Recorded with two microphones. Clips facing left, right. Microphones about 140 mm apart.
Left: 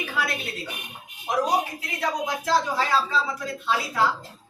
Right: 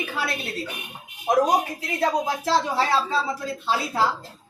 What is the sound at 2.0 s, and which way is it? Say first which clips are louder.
A woman's voice: right 4 dB; 30° right (ahead or behind).